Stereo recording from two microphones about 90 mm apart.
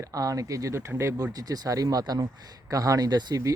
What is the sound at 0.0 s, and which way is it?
Speech, 40° right (ahead or behind).